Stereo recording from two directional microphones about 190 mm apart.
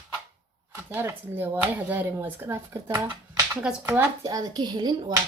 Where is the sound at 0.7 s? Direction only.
10° right (ahead or behind).